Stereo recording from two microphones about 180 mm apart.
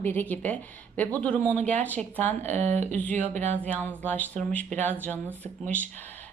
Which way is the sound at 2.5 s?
40° right (ahead or behind).